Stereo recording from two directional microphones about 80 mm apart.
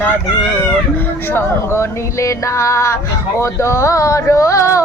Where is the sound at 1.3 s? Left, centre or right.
Left.